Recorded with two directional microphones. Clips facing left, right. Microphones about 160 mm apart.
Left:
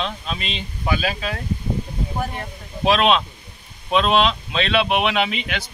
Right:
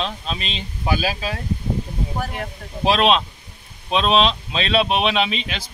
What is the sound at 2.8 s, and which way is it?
Speech, 30° right (ahead or behind).